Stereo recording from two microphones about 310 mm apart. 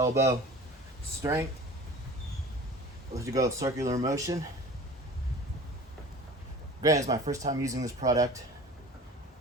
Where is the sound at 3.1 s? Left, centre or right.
Centre.